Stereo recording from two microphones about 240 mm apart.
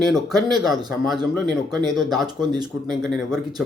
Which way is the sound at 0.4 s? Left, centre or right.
Centre.